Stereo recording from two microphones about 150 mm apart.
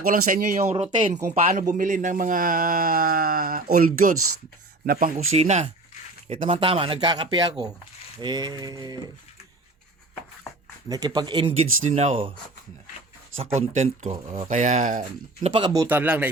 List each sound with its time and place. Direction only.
0.0 s speech: 70° right (ahead or behind)
5.1 s speech: 50° right (ahead or behind); by 9.0 s 25° right (ahead or behind)
10.8 s speech: 25° right (ahead or behind)
11.9 s speech: 50° right (ahead or behind)
13.3 s speech: 50° right (ahead or behind)
15.4 s speech: 35° right (ahead or behind)
15.9 s speech: 10° right (ahead or behind)